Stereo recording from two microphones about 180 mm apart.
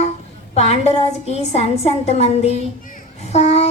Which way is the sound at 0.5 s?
35° left (ahead or behind).